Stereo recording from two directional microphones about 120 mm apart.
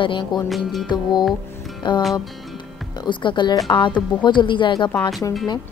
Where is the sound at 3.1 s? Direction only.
40° left (ahead or behind).